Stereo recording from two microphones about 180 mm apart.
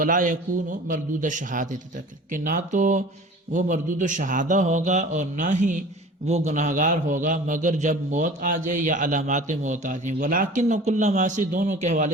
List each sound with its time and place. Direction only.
0.0 s a man's voice: 45° right (ahead or behind)